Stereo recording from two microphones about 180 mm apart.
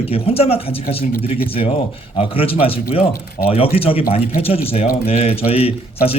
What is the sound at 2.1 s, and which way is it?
Speech, 30° left (ahead or behind).